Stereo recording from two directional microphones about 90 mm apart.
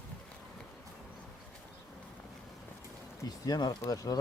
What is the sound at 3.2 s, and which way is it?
Speech, 45° left (ahead or behind).